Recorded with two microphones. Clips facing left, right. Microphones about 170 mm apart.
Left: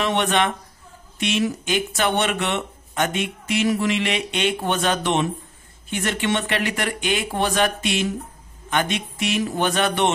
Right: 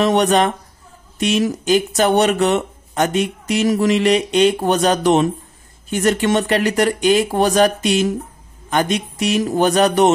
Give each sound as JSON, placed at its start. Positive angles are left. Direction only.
{"t": 0.0, "sound": "speech", "side_deg": -40}